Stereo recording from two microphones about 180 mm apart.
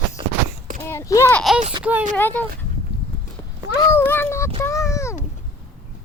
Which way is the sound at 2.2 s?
10° left (ahead or behind).